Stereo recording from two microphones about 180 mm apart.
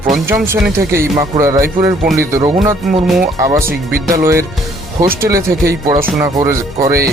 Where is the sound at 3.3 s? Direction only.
15° right (ahead or behind).